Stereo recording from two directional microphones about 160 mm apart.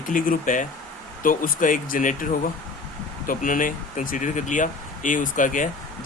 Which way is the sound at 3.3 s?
60° left (ahead or behind).